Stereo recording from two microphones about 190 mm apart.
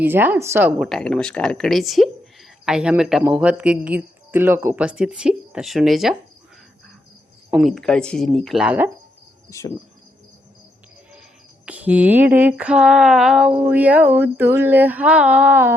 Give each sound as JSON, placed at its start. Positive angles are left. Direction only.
{"t": 0.0, "sound": "cricket", "side_deg": -10}
{"t": 0.8, "sound": "speech", "side_deg": 0}
{"t": 7.5, "sound": "speech", "side_deg": 0}
{"t": 9.5, "sound": "cricket", "side_deg": 15}
{"t": 11.1, "sound": "cricket", "side_deg": -5}